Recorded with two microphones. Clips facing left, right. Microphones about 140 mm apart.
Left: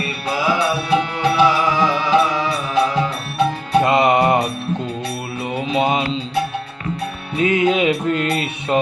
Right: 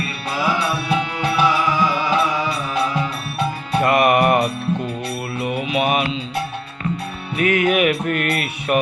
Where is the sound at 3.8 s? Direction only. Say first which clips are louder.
Right 1 dB; 25° left (ahead or behind).